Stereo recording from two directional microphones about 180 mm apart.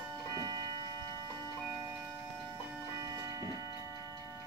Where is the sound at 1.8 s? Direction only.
15° right (ahead or behind).